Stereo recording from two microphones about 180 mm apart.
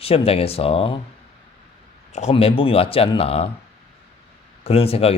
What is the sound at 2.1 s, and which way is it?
Speech, 40° left (ahead or behind).